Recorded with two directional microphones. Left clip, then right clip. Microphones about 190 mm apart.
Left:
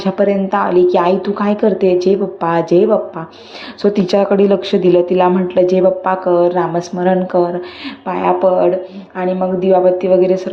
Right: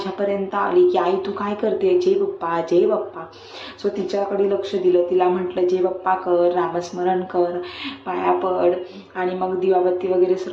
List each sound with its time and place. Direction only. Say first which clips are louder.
0.0 s speech: left 8 dB; 35° left (ahead or behind)
3.9 s speech: left 9 dB; 45° left (ahead or behind)